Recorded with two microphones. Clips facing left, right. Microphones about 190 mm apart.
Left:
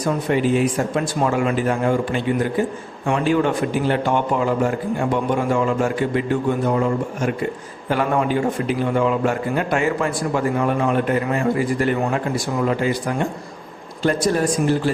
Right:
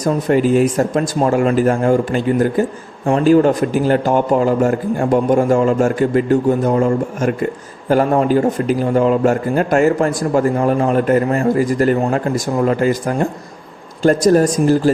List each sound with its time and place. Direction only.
0.0 s a man's voice: 45° right (ahead or behind)